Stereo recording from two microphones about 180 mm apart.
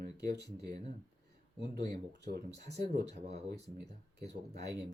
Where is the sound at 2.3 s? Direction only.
65° right (ahead or behind).